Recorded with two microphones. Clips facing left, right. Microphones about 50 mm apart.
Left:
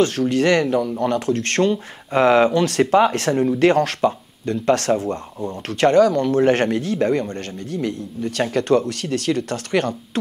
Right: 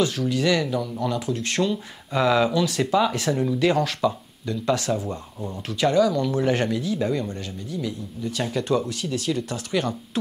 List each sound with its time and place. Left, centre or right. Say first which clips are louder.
0.0 s speech: left 5 dB; left